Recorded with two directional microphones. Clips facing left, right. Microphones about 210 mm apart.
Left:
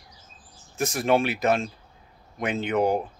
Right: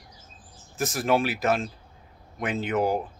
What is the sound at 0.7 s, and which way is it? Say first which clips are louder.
Speech: left 2 dB; centre (ahead or behind).